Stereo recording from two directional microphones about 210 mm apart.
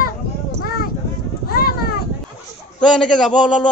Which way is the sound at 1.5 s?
45° left (ahead or behind).